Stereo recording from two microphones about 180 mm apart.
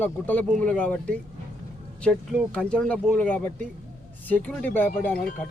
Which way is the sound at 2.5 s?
5° left (ahead or behind).